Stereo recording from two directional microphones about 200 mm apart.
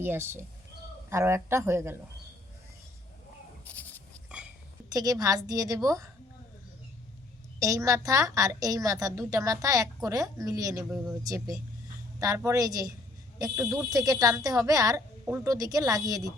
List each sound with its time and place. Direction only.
0.0 s a woman's voice: 10° right (ahead or behind)
3.7 s goat: 10° left (ahead or behind)
4.9 s a woman's voice: 20° right (ahead or behind)
7.6 s a woman's voice: 15° right (ahead or behind)
13.9 s a woman's voice: 15° right (ahead or behind)